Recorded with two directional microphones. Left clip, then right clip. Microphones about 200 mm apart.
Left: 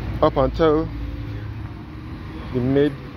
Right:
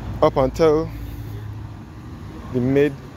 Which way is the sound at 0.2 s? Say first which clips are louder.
Right 1 dB; 25° right (ahead or behind).